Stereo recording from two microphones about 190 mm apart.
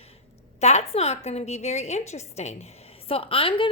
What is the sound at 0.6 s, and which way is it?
A woman's voice, 35° left (ahead or behind).